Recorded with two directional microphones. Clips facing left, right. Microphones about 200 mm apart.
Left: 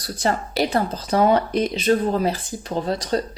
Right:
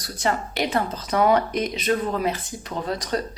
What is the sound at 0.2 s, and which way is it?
A woman's voice, 35° left (ahead or behind).